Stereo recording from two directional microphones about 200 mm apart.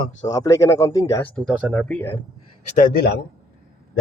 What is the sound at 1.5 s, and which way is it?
Speech, centre (ahead or behind).